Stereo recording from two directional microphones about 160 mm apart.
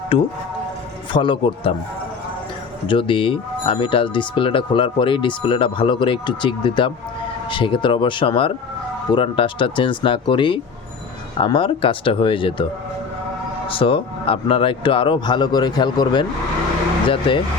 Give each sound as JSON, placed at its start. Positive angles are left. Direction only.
{"t": 1.1, "sound": "speech", "side_deg": 30}
{"t": 2.8, "sound": "speech", "side_deg": 30}
{"t": 13.7, "sound": "speech", "side_deg": 35}